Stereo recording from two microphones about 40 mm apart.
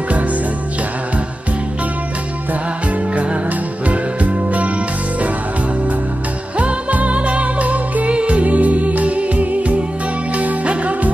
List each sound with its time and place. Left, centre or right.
3.4 s music: right
6.6 s music: right